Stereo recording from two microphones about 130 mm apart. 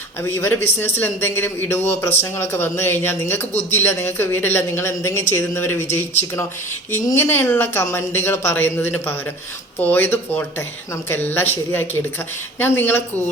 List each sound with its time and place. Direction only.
0.3 s a man's voice: 20° left (ahead or behind)